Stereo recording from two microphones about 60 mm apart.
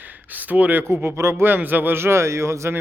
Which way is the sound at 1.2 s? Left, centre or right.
Right.